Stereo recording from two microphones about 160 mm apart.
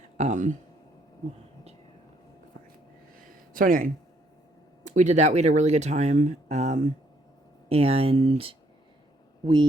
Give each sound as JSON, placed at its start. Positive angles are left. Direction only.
{"t": 0.2, "sound": "speech", "side_deg": -50}
{"t": 3.5, "sound": "speech", "side_deg": -60}
{"t": 9.4, "sound": "speech", "side_deg": -30}